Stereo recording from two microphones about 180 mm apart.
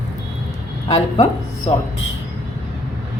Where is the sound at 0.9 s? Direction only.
35° left (ahead or behind).